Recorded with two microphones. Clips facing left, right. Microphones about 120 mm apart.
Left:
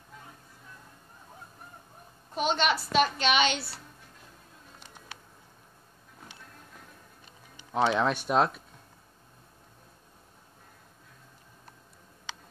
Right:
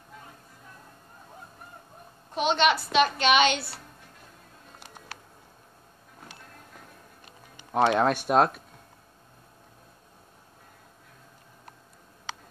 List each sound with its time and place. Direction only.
2.3 s a woman's voice: 70° right (ahead or behind)
4.7 s music: 60° right (ahead or behind)
7.2 s speech: 55° right (ahead or behind)